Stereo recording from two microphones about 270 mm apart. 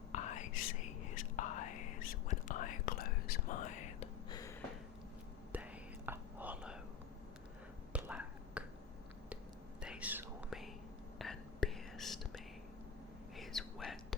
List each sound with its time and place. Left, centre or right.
0.1 s whispering: left
4.3 s a sound: centre
5.5 s whispering: centre
7.9 s finger snapping: centre
9.8 s whispering: centre